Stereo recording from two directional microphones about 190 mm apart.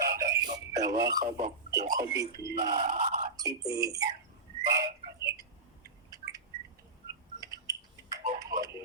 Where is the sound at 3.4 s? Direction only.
15° right (ahead or behind).